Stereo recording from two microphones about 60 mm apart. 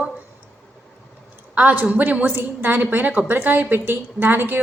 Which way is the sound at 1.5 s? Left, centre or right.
Right.